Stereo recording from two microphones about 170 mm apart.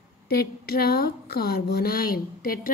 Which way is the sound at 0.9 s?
65° left (ahead or behind).